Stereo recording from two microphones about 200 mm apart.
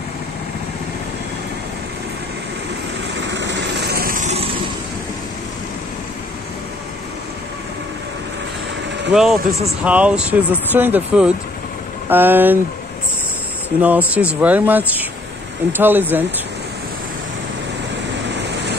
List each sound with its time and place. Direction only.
3.3 s vehicle: 60° right (ahead or behind); by 4.5 s 35° right (ahead or behind)
9.1 s speech: centre (ahead or behind)
13.7 s speech: 5° right (ahead or behind)